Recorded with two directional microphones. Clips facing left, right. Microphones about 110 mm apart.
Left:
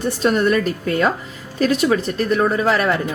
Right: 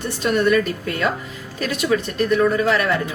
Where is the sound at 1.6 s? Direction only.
40° left (ahead or behind).